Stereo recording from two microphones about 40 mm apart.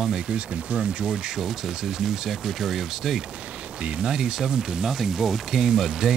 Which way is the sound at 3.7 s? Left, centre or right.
Right.